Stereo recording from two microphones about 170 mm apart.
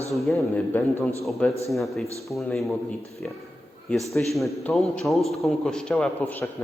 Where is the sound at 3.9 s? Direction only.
Centre (ahead or behind).